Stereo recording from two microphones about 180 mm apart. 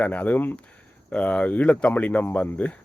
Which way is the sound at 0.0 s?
10° left (ahead or behind).